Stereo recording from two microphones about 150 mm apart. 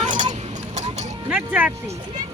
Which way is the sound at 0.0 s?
55° right (ahead or behind).